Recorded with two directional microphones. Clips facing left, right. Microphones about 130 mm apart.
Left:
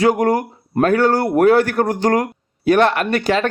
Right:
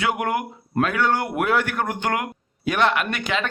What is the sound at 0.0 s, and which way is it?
A man's voice, 40° left (ahead or behind).